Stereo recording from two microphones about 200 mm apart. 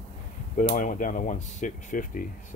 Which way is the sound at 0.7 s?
40° left (ahead or behind).